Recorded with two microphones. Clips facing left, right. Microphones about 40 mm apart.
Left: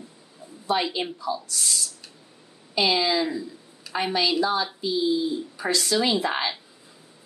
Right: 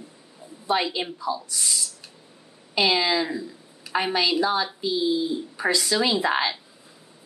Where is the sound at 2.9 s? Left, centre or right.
Right.